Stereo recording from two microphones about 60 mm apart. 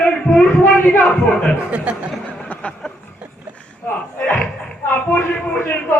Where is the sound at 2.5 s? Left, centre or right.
Left.